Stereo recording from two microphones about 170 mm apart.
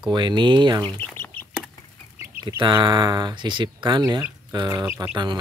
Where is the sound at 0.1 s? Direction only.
25° right (ahead or behind).